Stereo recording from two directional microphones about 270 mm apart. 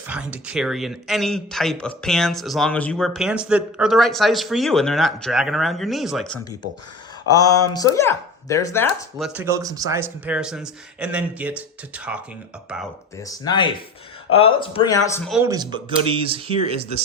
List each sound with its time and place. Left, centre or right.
0.1 s speech: centre
7.3 s speech: centre
13.1 s speech: centre
15.3 s speech: centre